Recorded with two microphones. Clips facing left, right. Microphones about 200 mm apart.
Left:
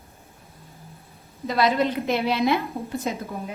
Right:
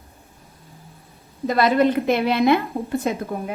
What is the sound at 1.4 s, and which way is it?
A woman's voice, 55° right (ahead or behind).